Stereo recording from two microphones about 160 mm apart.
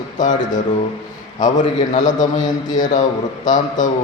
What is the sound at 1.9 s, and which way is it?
A man's voice, 50° left (ahead or behind).